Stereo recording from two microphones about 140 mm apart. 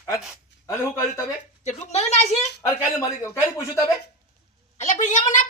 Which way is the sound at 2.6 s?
20° left (ahead or behind).